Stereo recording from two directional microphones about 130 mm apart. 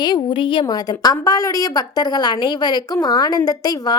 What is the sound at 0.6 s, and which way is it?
A woman's voice, 30° left (ahead or behind).